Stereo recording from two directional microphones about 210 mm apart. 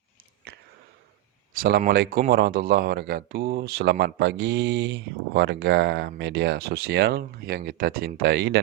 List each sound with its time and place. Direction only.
0.5 s sniff: 50° right (ahead or behind)
1.5 s speech: 45° right (ahead or behind)